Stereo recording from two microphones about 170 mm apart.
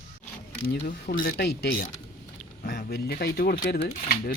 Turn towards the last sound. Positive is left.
turn(degrees=60)  # may be behind; listen again after turning